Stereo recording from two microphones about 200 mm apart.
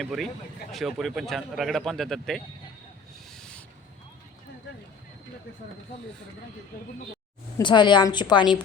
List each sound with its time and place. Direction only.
0.0 s a man's voice: centre (ahead or behind)
3.2 s owl: 5° left (ahead or behind)
7.6 s a woman's voice: 20° left (ahead or behind)